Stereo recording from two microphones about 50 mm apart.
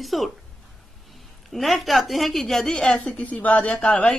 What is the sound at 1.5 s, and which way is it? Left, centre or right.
Speech, centre.